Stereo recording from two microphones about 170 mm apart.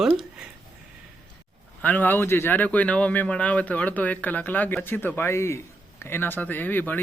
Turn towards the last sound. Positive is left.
turn(degrees=10)  # may be behind; listen again after turning